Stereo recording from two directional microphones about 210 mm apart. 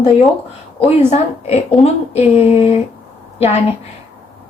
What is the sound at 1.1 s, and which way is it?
A woman's voice, 30° left (ahead or behind).